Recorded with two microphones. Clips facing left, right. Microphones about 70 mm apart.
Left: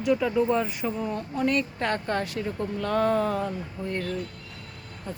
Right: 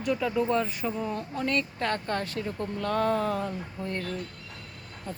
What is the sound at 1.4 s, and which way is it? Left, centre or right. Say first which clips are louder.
Speech: left 3 dB; centre.